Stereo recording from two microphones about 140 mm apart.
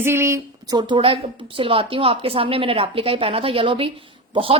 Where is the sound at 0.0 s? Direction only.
20° right (ahead or behind).